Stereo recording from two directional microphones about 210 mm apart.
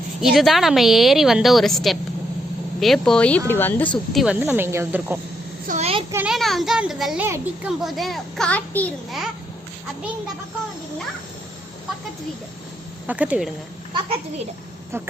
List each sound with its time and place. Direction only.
0.2 s a woman's voice: centre (ahead or behind)
4.1 s speech: centre (ahead or behind)
5.6 s a child's voice: 30° right (ahead or behind)
6.1 s a woman's voice: 5° right (ahead or behind)
7.8 s a woman's voice: centre (ahead or behind)
13.1 s a woman's voice: 5° right (ahead or behind)